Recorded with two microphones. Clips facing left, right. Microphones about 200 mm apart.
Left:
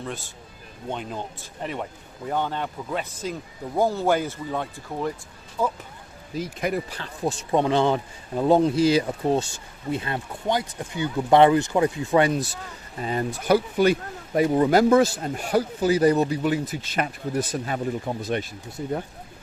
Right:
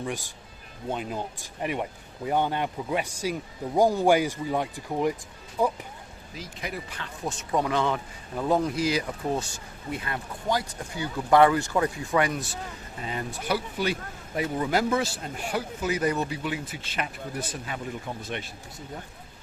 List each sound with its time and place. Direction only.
0.0 s speech: 15° right (ahead or behind)
6.6 s speech: 50° left (ahead or behind)
6.9 s speech: 30° left (ahead or behind)